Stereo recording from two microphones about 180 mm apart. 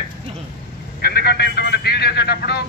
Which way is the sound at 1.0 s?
60° left (ahead or behind).